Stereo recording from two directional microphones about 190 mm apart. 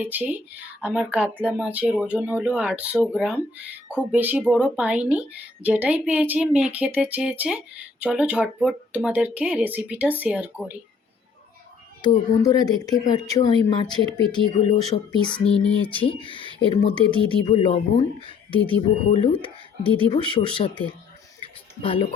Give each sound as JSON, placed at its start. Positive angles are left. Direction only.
{"t": 0.0, "sound": "speech", "side_deg": -10}
{"t": 12.4, "sound": "speech", "side_deg": 20}